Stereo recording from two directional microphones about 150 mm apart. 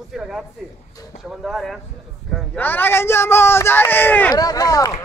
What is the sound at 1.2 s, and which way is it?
Speech, centre (ahead or behind).